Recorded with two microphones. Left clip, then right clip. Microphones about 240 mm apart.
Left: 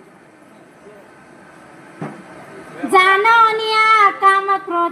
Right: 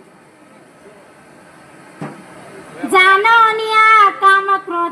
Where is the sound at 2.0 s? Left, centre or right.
Right.